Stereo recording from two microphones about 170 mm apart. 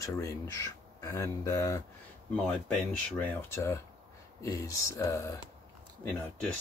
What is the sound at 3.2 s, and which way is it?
Speech, 15° left (ahead or behind).